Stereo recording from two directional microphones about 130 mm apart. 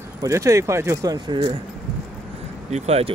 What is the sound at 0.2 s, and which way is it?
Speech, 25° right (ahead or behind).